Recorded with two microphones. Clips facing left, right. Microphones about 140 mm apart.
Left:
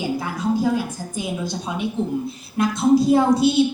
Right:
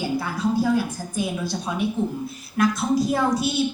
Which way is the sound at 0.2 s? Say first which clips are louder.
Left 1 dB; 15° left (ahead or behind).